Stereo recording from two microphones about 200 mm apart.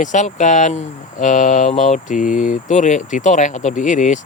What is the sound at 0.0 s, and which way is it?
Speech, 40° left (ahead or behind).